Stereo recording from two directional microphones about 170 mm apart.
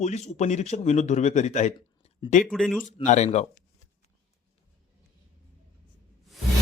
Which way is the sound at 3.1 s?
45° left (ahead or behind).